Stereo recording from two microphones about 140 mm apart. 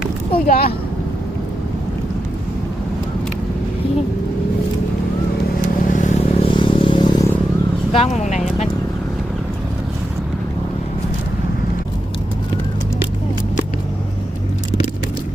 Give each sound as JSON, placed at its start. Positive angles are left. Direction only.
{"t": 0.3, "sound": "speech", "side_deg": 90}
{"t": 5.9, "sound": "vehicle", "side_deg": 60}
{"t": 6.4, "sound": "vehicle", "side_deg": 35}
{"t": 7.9, "sound": "vehicle", "side_deg": 55}